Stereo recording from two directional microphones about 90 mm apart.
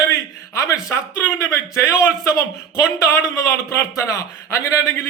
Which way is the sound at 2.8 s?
30° left (ahead or behind).